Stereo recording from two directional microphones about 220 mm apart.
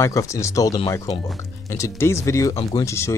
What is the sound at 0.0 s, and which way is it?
Speech, 15° left (ahead or behind).